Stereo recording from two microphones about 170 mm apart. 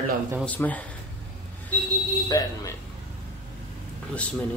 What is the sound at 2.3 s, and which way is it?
Speech, 20° left (ahead or behind).